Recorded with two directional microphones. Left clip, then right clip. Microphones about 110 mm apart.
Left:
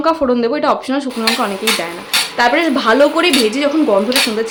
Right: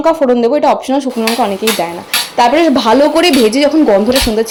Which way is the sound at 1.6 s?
30° right (ahead or behind).